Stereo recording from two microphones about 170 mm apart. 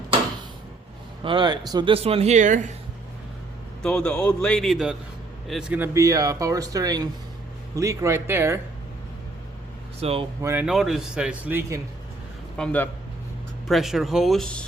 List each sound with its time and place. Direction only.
1.2 s speech: 30° right (ahead or behind); by 2.7 s 45° right (ahead or behind)
3.8 s a man's voice: 5° left (ahead or behind); by 8.5 s 15° right (ahead or behind)
10.0 s speech: 35° right (ahead or behind)
10.4 s a man's voice: 10° right (ahead or behind)
12.5 s a man's voice: 5° left (ahead or behind)